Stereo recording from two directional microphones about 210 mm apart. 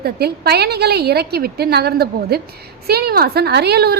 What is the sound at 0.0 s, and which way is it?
A woman's voice, 50° right (ahead or behind).